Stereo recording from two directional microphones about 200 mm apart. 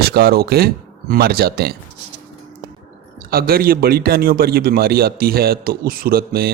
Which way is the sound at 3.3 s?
50° right (ahead or behind).